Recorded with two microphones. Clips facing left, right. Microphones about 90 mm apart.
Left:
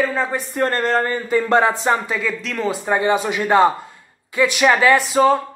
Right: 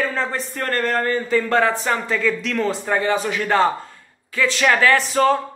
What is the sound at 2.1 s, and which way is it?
Speech, 5° left (ahead or behind).